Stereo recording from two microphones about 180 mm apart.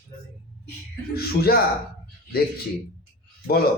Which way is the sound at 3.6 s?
60° left (ahead or behind).